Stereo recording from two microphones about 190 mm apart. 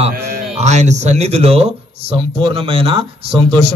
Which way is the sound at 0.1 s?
55° right (ahead or behind).